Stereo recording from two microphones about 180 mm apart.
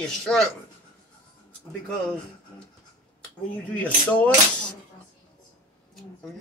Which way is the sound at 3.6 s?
5° left (ahead or behind).